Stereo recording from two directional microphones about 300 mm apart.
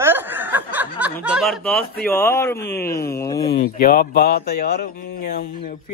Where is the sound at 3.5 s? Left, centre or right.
Left.